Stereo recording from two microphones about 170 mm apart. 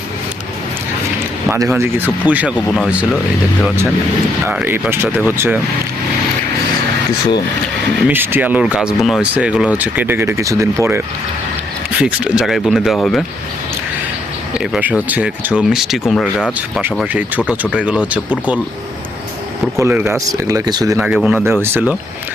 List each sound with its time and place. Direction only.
1.5 s speech: 15° right (ahead or behind)
2.6 s speech: centre (ahead or behind)
4.4 s speech: 10° right (ahead or behind)
8.0 s speech: 10° right (ahead or behind)
14.6 s speech: 5° right (ahead or behind)
19.7 s speech: 15° right (ahead or behind)
21.0 s speech: 5° right (ahead or behind)